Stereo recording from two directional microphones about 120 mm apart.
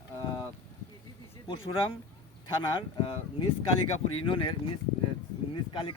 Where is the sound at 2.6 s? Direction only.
45° left (ahead or behind).